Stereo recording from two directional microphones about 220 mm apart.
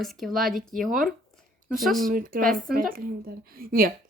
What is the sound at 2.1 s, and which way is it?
Speech, 40° right (ahead or behind).